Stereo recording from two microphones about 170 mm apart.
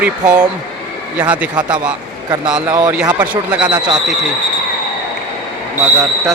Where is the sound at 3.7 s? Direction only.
25° right (ahead or behind).